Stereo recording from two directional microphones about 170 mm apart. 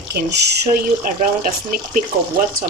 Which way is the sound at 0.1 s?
80° right.